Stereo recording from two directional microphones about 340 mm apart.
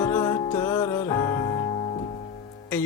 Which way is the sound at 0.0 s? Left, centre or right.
Centre.